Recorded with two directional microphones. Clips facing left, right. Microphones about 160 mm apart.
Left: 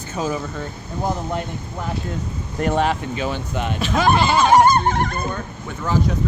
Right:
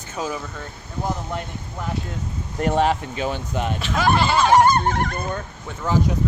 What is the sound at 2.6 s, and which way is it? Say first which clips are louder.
Speech: even; 30° right (ahead or behind).